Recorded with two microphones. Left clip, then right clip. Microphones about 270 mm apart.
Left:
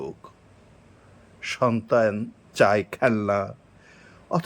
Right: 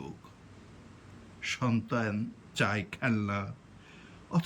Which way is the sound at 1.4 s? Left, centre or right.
Centre.